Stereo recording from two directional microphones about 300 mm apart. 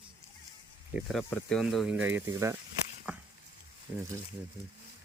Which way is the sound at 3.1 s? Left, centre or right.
Centre.